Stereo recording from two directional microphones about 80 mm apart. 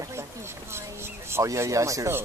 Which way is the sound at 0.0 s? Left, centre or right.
Right.